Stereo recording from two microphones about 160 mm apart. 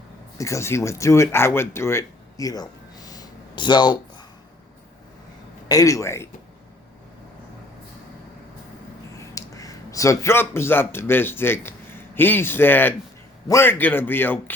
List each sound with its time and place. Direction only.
0.3 s speech: 20° left (ahead or behind)
5.6 s speech: 20° left (ahead or behind)
9.1 s speech: 20° left (ahead or behind)